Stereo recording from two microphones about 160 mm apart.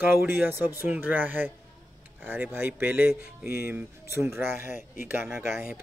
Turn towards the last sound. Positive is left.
turn(degrees=0)  # may be behind; listen again after turning